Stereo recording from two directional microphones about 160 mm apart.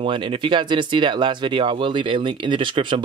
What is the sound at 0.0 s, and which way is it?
Speech, 30° right (ahead or behind).